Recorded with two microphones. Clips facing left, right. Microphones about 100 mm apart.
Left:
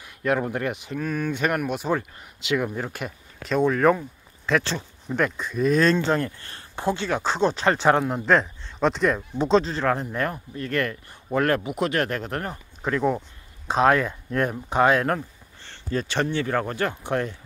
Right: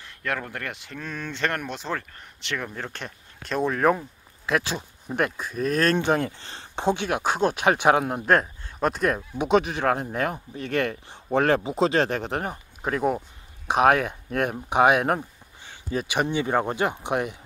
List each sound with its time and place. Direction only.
0.0 s speech: 20° left (ahead or behind); by 13.2 s 10° right (ahead or behind)
13.8 s speech: 70° right (ahead or behind)
14.5 s speech: 15° right (ahead or behind)